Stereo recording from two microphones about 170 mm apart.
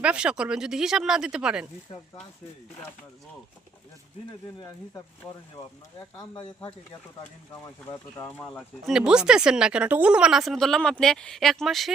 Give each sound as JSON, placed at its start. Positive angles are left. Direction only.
{"t": 0.0, "sound": "speech", "side_deg": -5}
{"t": 6.0, "sound": "speech", "side_deg": 20}
{"t": 7.5, "sound": "speech", "side_deg": 15}
{"t": 8.4, "sound": "speech", "side_deg": 5}